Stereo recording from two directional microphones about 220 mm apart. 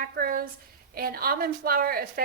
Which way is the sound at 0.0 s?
40° right (ahead or behind).